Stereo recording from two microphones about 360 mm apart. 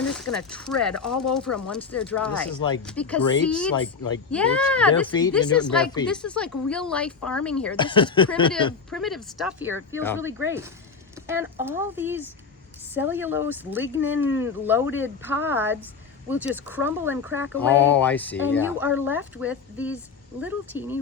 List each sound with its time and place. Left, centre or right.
0.0 s a sound: centre
0.3 s speech: centre
7.2 s speech: left
7.4 s speech: centre
8.9 s speech: centre
17.5 s speech: centre